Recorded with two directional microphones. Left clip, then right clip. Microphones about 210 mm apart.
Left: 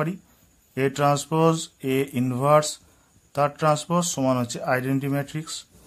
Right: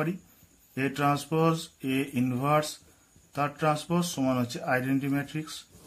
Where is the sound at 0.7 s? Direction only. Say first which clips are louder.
Left 6 dB; 40° left (ahead or behind).